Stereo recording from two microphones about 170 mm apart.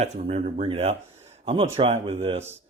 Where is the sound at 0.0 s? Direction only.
40° right (ahead or behind).